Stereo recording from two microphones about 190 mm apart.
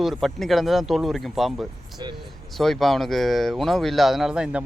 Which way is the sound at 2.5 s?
Centre (ahead or behind).